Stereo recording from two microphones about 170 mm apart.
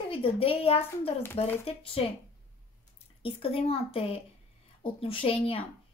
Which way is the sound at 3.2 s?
35° left (ahead or behind).